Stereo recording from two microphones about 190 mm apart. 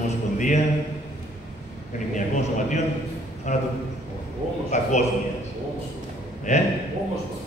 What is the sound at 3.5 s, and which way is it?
Speech, 40° left (ahead or behind).